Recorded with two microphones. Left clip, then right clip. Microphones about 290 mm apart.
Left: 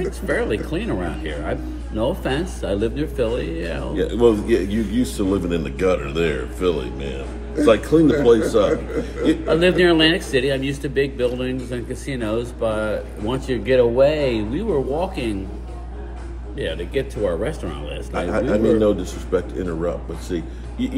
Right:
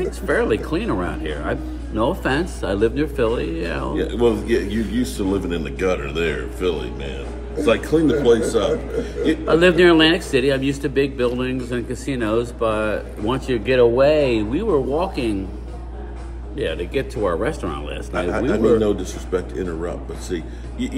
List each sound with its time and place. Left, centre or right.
0.3 s a man's voice: centre
3.9 s a man's voice: centre
9.5 s a man's voice: centre
16.5 s speech: centre
18.3 s a man's voice: centre